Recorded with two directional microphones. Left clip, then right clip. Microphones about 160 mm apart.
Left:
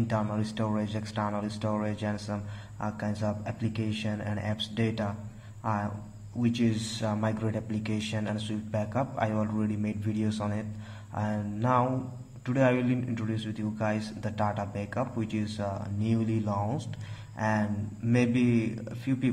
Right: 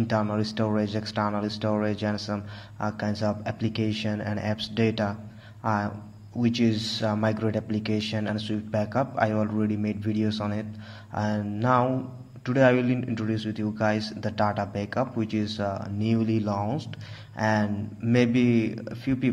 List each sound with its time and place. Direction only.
0.0 s a man's voice: 20° right (ahead or behind)